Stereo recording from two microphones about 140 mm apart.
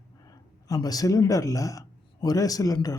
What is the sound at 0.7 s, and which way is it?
Speech, 25° left (ahead or behind).